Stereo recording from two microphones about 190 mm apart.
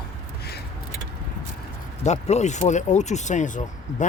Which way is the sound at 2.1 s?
35° left (ahead or behind).